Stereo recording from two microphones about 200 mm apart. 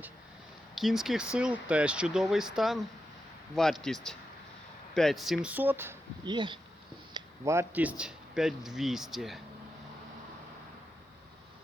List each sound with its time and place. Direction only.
0.8 s speech: centre (ahead or behind)
6.2 s speech: 25° right (ahead or behind); by 9.4 s centre (ahead or behind)